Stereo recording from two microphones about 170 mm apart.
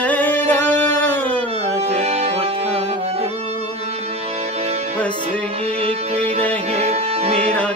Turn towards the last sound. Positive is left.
turn(degrees=-35)  # may be behind; listen again after turning